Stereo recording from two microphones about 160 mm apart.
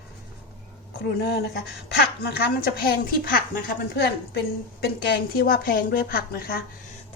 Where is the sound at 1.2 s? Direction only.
90° left.